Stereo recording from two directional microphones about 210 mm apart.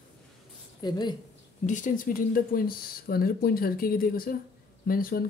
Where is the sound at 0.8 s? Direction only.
20° left (ahead or behind).